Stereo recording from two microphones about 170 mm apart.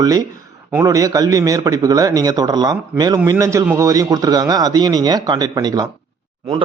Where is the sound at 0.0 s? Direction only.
20° right (ahead or behind).